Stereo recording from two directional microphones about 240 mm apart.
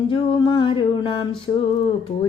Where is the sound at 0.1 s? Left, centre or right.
Centre.